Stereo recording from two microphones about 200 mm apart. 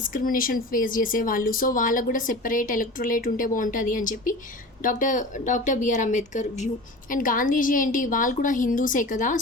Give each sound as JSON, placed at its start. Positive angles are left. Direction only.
{"t": 0.0, "sound": "a woman's voice", "side_deg": 45}